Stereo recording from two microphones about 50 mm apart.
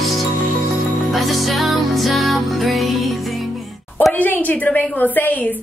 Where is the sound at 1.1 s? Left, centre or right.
Centre.